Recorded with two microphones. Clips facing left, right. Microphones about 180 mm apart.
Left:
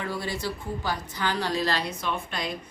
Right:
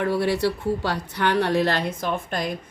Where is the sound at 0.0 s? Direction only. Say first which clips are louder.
Right 9 dB; 65° right (ahead or behind).